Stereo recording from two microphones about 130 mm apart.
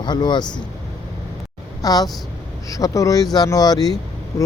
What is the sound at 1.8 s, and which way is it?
Speech, 30° left (ahead or behind).